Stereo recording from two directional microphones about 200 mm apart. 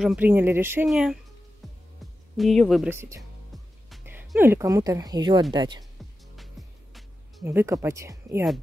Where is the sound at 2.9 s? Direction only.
15° right (ahead or behind).